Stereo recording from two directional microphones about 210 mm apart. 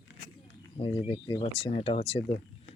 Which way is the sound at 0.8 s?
25° left (ahead or behind).